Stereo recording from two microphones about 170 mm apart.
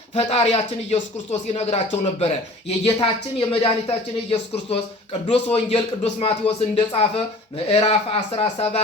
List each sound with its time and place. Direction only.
0.1 s speech: 35° left (ahead or behind)